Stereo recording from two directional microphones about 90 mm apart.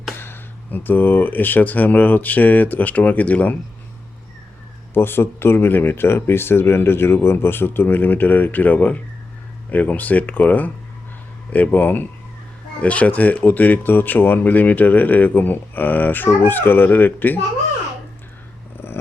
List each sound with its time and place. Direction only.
0.2 s speech: 25° left (ahead or behind)
4.9 s speech: 25° left (ahead or behind)